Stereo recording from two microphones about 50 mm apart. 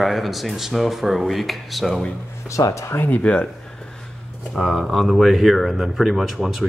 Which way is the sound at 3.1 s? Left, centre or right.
Left.